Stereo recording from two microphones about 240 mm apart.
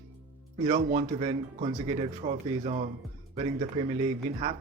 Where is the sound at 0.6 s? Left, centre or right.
Right.